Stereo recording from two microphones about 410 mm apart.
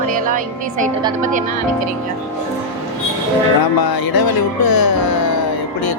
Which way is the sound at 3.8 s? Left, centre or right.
Left.